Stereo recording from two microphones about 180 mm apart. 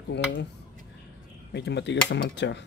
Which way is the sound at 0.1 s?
75° left (ahead or behind).